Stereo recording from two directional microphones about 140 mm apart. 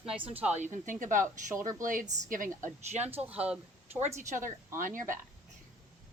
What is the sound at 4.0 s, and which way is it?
Speech, 55° right (ahead or behind).